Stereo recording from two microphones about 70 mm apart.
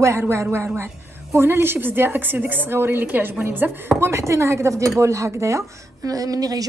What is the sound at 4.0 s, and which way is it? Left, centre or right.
A woman's voice, right.